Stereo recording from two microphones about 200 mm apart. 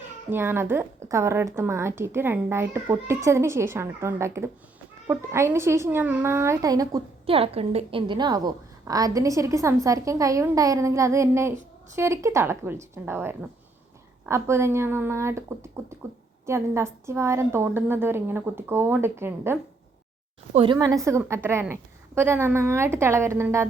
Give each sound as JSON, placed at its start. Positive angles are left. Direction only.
{"t": 0.3, "sound": "a woman's voice", "side_deg": -10}
{"t": 20.5, "sound": "a woman's voice", "side_deg": -30}
{"t": 20.7, "sound": "a woman's voice", "side_deg": -15}